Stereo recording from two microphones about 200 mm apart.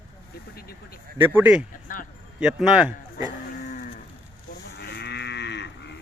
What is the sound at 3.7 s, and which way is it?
Cattle, 45° left (ahead or behind).